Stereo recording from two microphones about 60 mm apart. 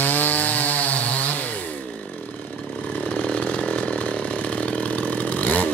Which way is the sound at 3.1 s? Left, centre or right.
Centre.